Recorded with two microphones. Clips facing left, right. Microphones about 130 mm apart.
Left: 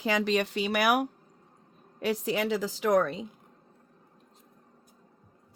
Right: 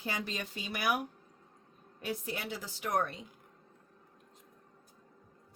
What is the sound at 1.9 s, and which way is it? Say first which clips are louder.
A woman's voice: left 10 dB; 90° left.